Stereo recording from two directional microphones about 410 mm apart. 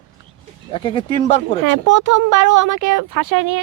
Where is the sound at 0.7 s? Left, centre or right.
Centre.